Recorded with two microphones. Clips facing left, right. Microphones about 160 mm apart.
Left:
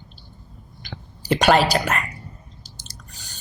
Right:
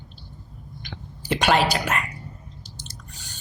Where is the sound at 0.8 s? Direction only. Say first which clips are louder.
Left 2 dB; 35° left (ahead or behind).